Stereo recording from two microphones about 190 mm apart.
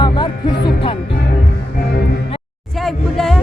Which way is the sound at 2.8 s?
Centre (ahead or behind).